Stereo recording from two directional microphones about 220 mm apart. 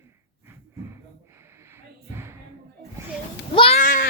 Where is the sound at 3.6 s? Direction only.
30° left (ahead or behind).